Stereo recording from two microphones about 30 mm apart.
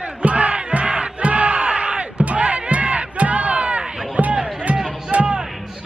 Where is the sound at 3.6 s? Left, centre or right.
Right.